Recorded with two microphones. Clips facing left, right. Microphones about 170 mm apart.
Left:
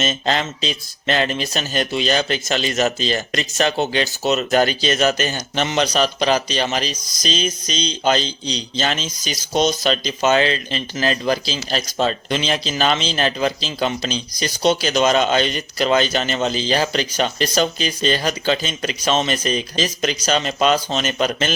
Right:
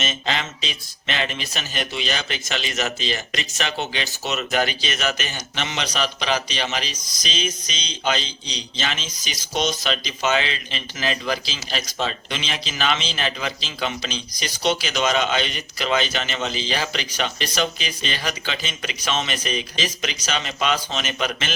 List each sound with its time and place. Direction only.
0.0 s speech: 40° left (ahead or behind)